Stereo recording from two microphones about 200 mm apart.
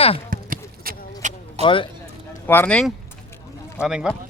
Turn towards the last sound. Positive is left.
turn(degrees=0)  # may be behind; listen again after turning